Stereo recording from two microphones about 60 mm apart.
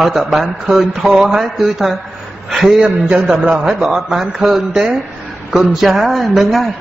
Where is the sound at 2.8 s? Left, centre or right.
Centre.